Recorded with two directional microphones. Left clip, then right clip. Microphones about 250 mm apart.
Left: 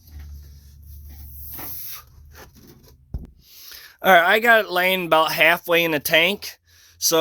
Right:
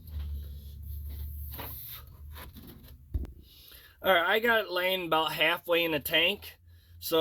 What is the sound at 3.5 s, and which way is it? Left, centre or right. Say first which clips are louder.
Speech: left 11 dB; left.